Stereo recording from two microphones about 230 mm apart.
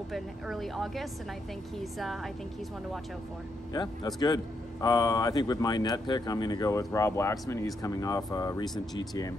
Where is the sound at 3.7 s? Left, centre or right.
Centre.